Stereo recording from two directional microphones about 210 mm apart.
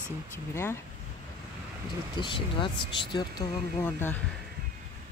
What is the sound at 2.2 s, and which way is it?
Speech, 25° left (ahead or behind).